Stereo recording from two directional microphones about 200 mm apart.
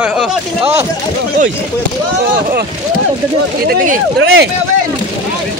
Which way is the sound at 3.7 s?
50° right (ahead or behind).